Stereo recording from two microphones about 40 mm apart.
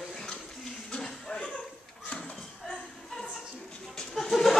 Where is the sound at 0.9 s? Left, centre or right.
Centre.